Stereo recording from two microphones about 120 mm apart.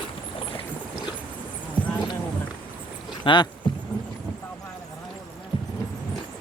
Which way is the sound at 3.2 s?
40° left (ahead or behind).